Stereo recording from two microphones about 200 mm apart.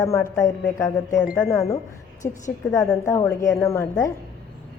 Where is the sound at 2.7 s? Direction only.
15° left (ahead or behind).